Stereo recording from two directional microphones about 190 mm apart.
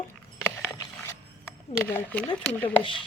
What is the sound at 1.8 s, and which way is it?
Speech, 10° left (ahead or behind).